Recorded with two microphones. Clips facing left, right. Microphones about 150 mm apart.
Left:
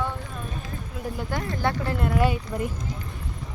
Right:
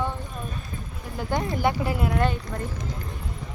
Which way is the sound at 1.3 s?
15° right (ahead or behind).